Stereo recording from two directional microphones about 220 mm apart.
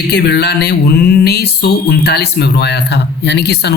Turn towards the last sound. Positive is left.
turn(degrees=50)  # may be behind; listen again after turning